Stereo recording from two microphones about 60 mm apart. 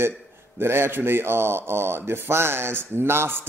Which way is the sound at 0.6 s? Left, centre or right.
Right.